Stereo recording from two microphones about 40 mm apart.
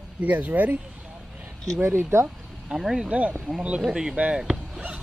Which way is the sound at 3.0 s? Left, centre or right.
Right.